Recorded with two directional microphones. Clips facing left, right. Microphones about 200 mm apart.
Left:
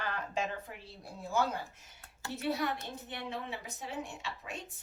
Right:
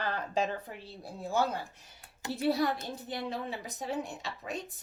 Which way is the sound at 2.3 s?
35° right (ahead or behind).